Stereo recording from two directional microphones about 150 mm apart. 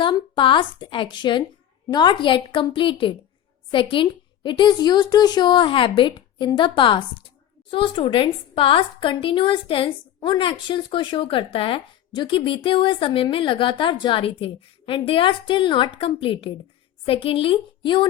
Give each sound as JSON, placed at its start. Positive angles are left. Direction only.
{"t": 0.0, "sound": "a woman's voice", "side_deg": 35}